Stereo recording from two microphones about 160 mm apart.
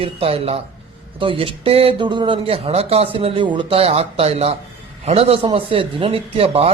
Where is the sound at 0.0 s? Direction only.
35° right (ahead or behind).